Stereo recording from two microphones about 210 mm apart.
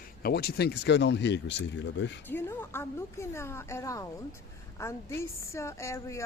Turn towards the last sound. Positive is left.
turn(degrees=15)  # may be behind; listen again after turning